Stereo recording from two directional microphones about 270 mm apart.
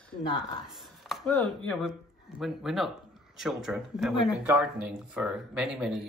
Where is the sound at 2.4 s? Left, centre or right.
Centre.